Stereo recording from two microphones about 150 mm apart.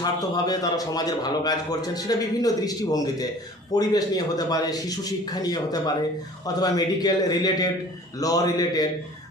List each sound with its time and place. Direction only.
0.0 s a man's voice: 25° left (ahead or behind)